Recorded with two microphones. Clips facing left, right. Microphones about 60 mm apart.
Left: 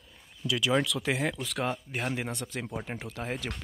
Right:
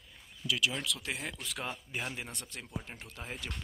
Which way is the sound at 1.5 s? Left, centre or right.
Left.